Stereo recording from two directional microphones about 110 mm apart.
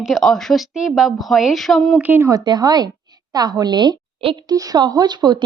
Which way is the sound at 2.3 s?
40° right (ahead or behind).